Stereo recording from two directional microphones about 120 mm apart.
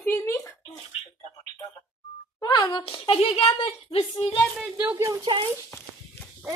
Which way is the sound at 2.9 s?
55° left (ahead or behind).